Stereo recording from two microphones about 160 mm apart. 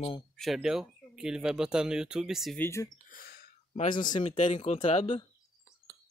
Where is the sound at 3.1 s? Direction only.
65° left (ahead or behind).